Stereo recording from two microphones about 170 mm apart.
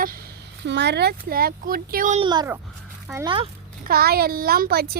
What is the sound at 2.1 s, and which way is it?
A child's voice, 25° right (ahead or behind).